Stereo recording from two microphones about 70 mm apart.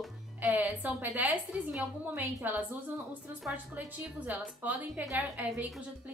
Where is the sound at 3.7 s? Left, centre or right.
Right.